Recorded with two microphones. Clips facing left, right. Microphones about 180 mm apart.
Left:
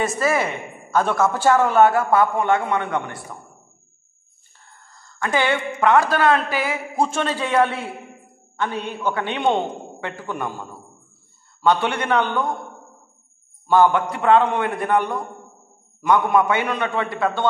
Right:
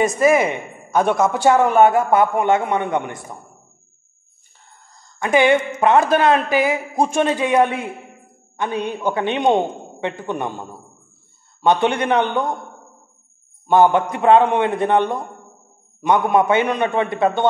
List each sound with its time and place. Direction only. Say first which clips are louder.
0.0 s a man's voice: right 6 dB; 15° right (ahead or behind)
4.9 s a sound: right 5 dB; 20° right (ahead or behind)
5.8 s a man's voice: left 2 dB; 20° right (ahead or behind)
13.7 s a man's voice: right 2 dB; 20° right (ahead or behind)